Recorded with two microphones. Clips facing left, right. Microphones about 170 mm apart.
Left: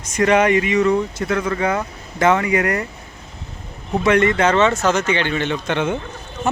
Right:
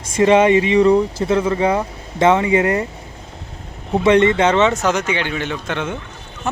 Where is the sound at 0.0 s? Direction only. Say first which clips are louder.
Right 3 dB; 25° right (ahead or behind).